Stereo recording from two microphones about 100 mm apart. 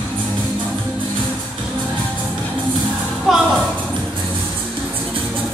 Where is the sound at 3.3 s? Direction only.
5° right (ahead or behind).